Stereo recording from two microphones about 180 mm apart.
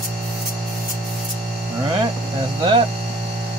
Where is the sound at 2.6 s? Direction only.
30° right (ahead or behind).